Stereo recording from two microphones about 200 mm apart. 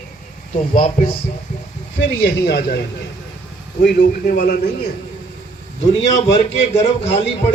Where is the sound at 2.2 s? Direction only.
55° left (ahead or behind).